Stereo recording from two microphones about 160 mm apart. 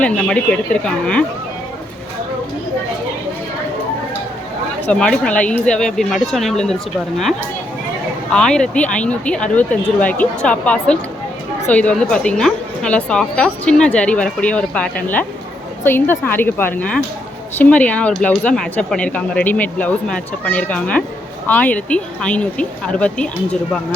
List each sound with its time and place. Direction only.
0.0 s a woman's voice: 5° left (ahead or behind)
4.9 s speech: 5° left (ahead or behind)
8.3 s a woman's voice: 5° left (ahead or behind)